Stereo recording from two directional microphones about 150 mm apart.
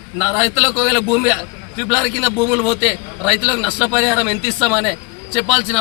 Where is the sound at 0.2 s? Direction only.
5° right (ahead or behind).